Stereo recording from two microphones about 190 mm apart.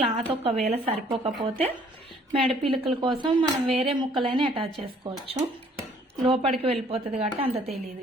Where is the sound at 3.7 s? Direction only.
30° right (ahead or behind).